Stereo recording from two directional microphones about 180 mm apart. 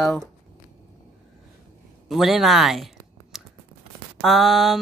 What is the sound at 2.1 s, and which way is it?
Speech, centre (ahead or behind).